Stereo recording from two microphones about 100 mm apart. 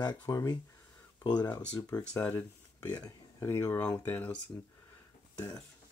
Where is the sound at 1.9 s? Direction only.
40° left (ahead or behind).